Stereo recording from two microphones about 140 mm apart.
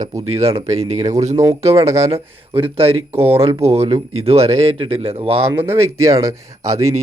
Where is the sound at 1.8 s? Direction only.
20° right (ahead or behind).